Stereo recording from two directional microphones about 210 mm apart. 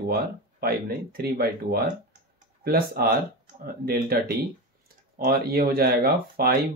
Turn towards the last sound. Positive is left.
turn(degrees=-45)  # may be behind; listen again after turning